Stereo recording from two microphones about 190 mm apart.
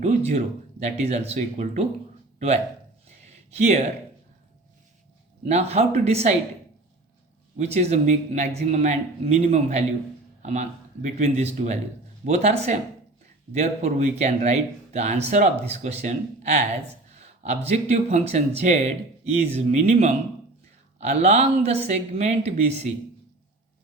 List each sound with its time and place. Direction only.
0.3 s speech: 35° right (ahead or behind)
3.2 s a sound: 35° right (ahead or behind)
5.5 s speech: 35° right (ahead or behind)
7.6 s a man's voice: 35° right (ahead or behind)